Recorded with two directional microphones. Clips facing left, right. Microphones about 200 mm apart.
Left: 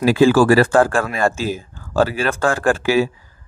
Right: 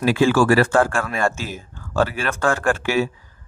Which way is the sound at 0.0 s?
35° left (ahead or behind).